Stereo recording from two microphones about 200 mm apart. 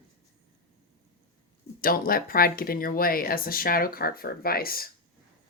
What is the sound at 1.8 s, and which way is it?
Speech, 45° left (ahead or behind).